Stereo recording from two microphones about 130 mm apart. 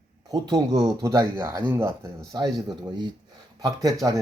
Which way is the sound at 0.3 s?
30° right (ahead or behind).